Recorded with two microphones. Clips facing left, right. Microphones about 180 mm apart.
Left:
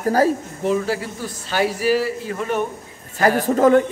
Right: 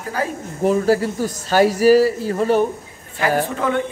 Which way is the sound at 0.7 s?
40° right (ahead or behind).